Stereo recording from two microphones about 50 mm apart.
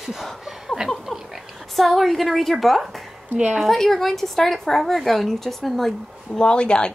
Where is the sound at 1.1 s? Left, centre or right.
Centre.